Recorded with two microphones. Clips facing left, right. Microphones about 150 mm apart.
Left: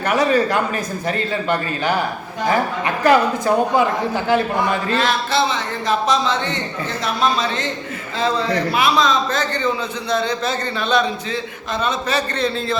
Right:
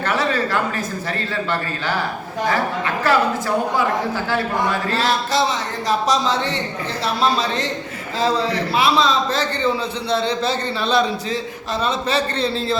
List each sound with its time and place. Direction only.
0.0 s a sound: 15° left (ahead or behind)
1.0 s a man's voice: 15° left (ahead or behind)
4.9 s speech: 35° right (ahead or behind)